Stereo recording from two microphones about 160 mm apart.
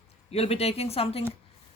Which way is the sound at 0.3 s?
40° left (ahead or behind).